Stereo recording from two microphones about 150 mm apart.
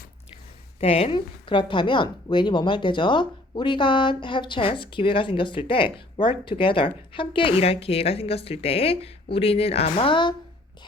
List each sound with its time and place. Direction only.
0.8 s speech: 40° left (ahead or behind)